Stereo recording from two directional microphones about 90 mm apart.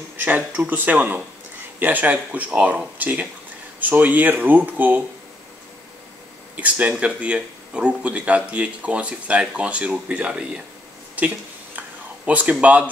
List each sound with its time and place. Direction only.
0.7 s speech: 20° right (ahead or behind)
6.5 s speech: 15° right (ahead or behind)
11.1 s a sound: 15° right (ahead or behind)
12.3 s speech: 15° right (ahead or behind)